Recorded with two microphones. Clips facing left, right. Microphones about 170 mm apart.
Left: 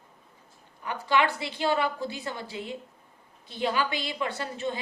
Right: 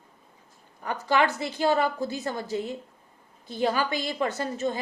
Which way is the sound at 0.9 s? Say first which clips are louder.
Right 2 dB; 45° right (ahead or behind).